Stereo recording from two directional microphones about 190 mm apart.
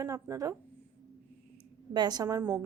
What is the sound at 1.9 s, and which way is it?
Speech, 20° right (ahead or behind).